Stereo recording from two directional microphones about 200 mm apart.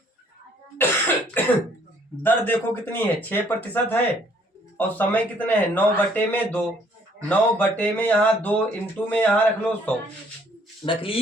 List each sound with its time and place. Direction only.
0.8 s cough: 10° left (ahead or behind)
2.2 s speech: 10° left (ahead or behind)
10.8 s speech: 25° left (ahead or behind)